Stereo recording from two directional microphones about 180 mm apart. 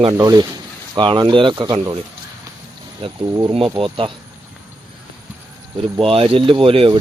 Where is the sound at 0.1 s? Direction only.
20° right (ahead or behind).